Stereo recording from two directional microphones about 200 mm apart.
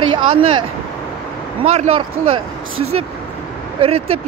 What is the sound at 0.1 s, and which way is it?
Speech, 30° right (ahead or behind).